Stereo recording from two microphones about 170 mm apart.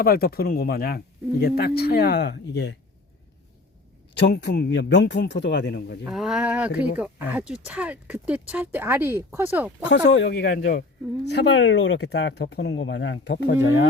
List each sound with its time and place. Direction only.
0.0 s speech: 60° left (ahead or behind); by 2.7 s 90° left
4.2 s a man's voice: 75° left (ahead or behind)
6.1 s speech: 5° right (ahead or behind)
9.8 s a man's voice: 90° left; by 10.8 s 70° left (ahead or behind)
11.3 s speech: 85° left